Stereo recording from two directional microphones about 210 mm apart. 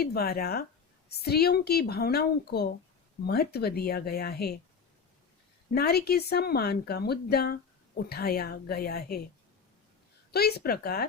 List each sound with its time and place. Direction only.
0.0 s speech: 50° left (ahead or behind)
5.7 s speech: 50° left (ahead or behind)
10.3 s speech: 50° left (ahead or behind)